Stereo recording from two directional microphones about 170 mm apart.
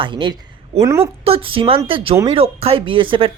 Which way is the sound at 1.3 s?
30° right (ahead or behind).